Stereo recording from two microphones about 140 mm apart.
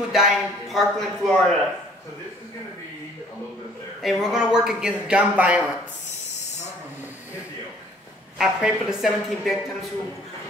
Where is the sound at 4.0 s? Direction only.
Centre (ahead or behind).